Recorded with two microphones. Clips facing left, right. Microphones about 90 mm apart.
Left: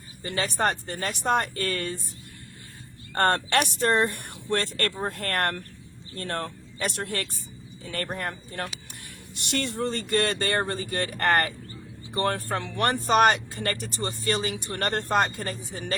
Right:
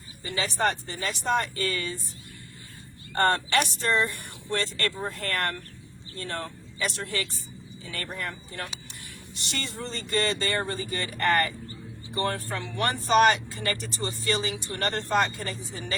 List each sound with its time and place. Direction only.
0.2 s speech: 50° left (ahead or behind)
3.2 s speech: 55° left (ahead or behind)